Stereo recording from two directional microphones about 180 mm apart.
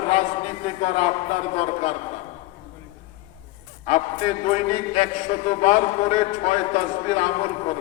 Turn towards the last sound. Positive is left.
turn(degrees=40)  # may be behind; listen again after turning